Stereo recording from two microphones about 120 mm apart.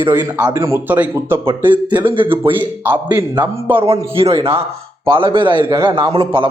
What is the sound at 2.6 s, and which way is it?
Speech, 15° right (ahead or behind).